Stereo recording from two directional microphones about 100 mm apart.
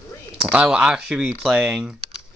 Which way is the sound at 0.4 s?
10° right (ahead or behind).